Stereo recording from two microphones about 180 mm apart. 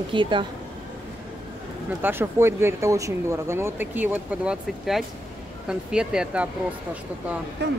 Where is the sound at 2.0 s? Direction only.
10° right (ahead or behind).